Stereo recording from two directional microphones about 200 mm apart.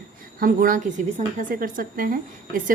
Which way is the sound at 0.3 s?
45° right (ahead or behind).